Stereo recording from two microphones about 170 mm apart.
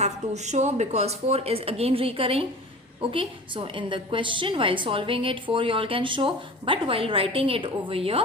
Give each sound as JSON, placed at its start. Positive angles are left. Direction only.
{"t": 0.0, "sound": "a woman's voice", "side_deg": -40}